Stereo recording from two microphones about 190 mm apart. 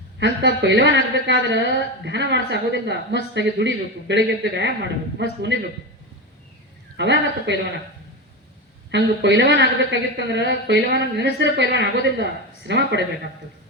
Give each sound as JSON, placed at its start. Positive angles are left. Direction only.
{"t": 0.2, "sound": "a man's voice", "side_deg": -65}
{"t": 6.9, "sound": "a man's voice", "side_deg": -65}
{"t": 8.9, "sound": "a man's voice", "side_deg": -65}